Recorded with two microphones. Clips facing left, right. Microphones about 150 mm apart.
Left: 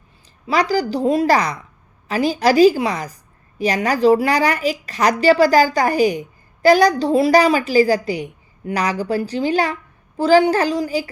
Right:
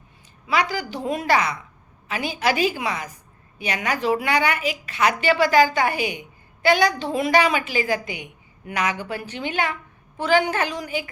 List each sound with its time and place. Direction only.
0.4 s a woman's voice: 35° left (ahead or behind)